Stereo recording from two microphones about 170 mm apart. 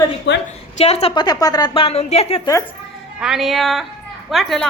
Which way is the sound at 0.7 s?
40° left (ahead or behind).